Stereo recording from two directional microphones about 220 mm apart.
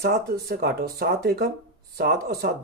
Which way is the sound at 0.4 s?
45° right (ahead or behind).